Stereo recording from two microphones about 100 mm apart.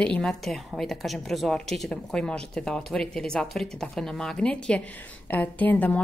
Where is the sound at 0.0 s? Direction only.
10° left (ahead or behind).